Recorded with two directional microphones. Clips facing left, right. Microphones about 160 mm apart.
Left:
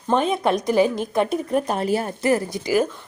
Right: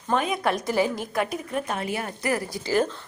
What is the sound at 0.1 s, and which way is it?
A woman's voice, 25° left (ahead or behind).